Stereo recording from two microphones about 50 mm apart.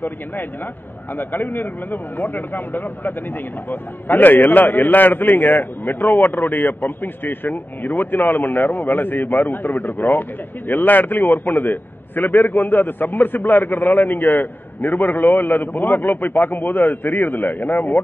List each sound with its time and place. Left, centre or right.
1.1 s a man's voice: left